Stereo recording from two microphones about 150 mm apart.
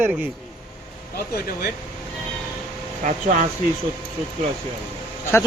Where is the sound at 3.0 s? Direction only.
60° right (ahead or behind).